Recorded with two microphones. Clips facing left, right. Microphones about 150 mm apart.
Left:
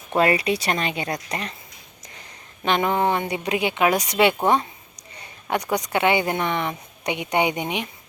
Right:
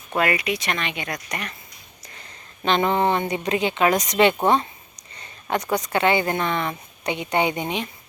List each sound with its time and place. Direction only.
0.1 s speech: 30° left (ahead or behind)
2.6 s speech: 10° left (ahead or behind)